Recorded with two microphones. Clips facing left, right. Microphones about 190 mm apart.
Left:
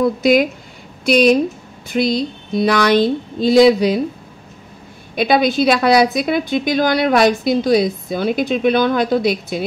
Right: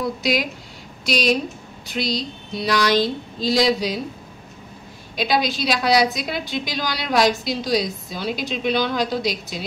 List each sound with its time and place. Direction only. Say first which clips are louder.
0.0 s a woman's voice: left 9 dB; 50° left (ahead or behind)
5.1 s a woman's voice: left 7 dB; 55° left (ahead or behind)